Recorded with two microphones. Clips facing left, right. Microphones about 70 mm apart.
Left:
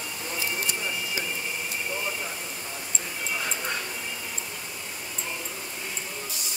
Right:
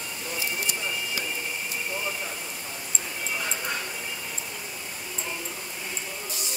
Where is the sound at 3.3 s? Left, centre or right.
Centre.